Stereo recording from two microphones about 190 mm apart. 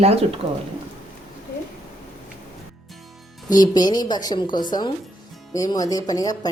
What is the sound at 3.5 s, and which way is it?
Speech, 20° left (ahead or behind).